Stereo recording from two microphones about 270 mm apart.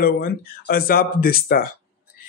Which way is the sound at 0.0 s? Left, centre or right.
Left.